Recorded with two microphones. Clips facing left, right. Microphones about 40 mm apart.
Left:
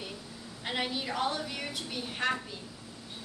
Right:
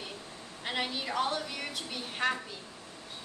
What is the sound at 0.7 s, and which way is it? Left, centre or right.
A woman's voice, centre.